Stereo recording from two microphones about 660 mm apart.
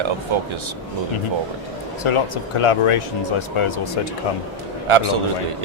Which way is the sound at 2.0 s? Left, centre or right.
Left.